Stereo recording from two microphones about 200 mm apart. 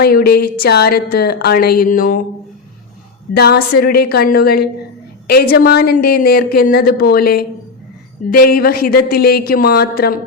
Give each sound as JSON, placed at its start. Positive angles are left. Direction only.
{"t": 0.0, "sound": "a woman's voice", "side_deg": 50}
{"t": 3.3, "sound": "a woman's voice", "side_deg": 55}